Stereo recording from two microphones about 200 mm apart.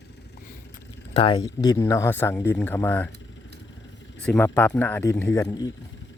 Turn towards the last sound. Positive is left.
turn(degrees=20)  # may be behind; listen again after turning